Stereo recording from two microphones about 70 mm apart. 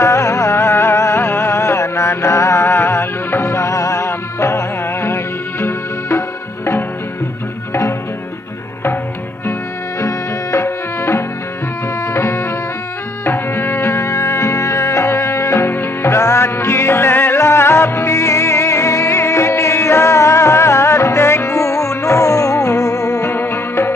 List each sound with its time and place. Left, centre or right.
0.0 s music: left
9.9 s music: left